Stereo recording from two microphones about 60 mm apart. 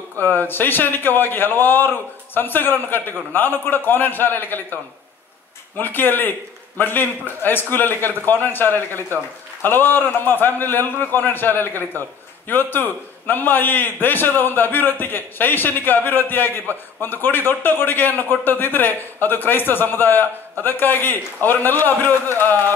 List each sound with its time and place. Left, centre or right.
0.2 s a man's voice: left
5.8 s a man's voice: left